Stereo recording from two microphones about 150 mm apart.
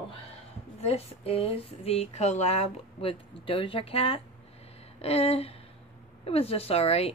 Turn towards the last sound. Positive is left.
turn(degrees=40)  # may be behind; listen again after turning